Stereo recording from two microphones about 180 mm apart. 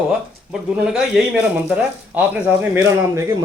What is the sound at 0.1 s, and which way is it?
Speech, 5° right (ahead or behind).